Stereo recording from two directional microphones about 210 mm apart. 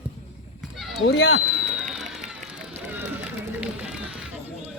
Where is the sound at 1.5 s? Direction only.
5° right (ahead or behind).